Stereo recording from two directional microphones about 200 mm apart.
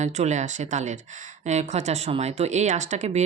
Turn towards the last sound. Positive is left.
turn(degrees=-35)  # may be behind; listen again after turning